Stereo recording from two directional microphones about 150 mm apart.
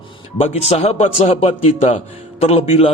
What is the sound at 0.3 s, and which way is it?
A man's voice, 45° left (ahead or behind).